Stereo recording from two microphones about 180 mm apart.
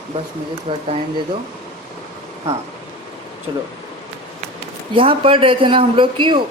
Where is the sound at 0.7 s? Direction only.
30° right (ahead or behind).